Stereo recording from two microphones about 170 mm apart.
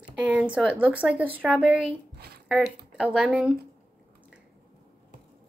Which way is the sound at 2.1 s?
70° right (ahead or behind).